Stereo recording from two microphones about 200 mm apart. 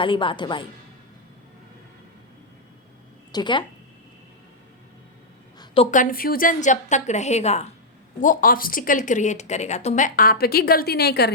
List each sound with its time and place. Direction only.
0.0 s a woman's voice: 25° left (ahead or behind)
3.3 s a woman's voice: 20° left (ahead or behind)
5.5 s a sound: 25° left (ahead or behind)
5.9 s a woman's voice: 45° left (ahead or behind)